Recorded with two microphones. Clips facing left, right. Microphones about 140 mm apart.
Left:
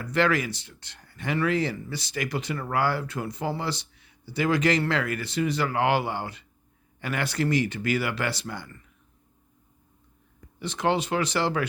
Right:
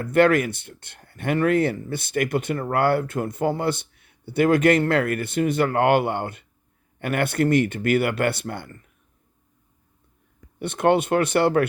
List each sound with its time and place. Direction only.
0.0 s speech: 55° right (ahead or behind)
10.6 s speech: 55° right (ahead or behind)